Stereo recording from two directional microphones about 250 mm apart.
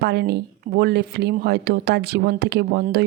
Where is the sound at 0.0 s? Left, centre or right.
Right.